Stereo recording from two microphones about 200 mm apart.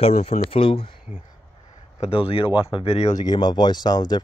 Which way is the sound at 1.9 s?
30° left (ahead or behind).